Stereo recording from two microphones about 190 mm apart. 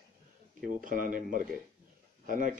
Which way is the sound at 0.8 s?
45° right (ahead or behind).